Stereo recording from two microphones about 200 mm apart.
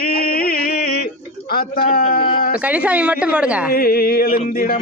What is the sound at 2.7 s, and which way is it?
Speech, 5° right (ahead or behind).